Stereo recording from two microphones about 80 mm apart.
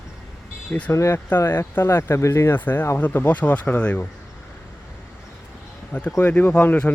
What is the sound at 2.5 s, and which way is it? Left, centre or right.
Speech, left.